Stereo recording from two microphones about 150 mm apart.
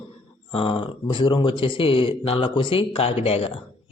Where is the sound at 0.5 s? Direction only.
35° left (ahead or behind).